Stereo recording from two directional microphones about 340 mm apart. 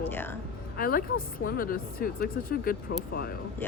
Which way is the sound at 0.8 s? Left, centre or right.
Left.